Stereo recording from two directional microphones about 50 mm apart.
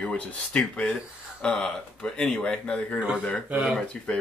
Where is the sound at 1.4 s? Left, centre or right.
Centre.